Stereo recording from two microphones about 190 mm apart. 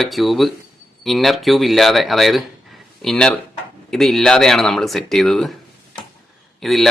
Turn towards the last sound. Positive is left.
turn(degrees=0)  # may be behind; listen again after turning